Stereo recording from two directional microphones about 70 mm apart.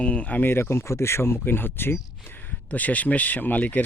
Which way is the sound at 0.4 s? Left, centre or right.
Left.